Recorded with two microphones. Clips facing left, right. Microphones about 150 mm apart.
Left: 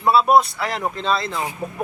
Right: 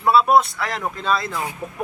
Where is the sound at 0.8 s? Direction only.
25° left (ahead or behind).